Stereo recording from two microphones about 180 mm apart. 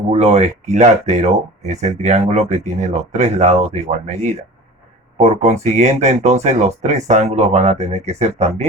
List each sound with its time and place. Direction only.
0.1 s speech: 35° right (ahead or behind)